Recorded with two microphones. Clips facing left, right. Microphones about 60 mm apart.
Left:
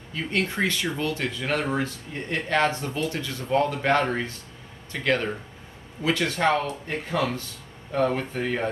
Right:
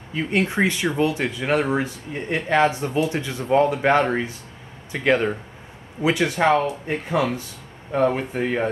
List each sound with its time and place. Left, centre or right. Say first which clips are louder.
0.1 s speech: right 5 dB; centre